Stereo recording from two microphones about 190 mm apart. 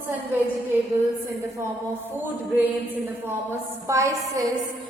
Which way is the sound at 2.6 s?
10° right (ahead or behind).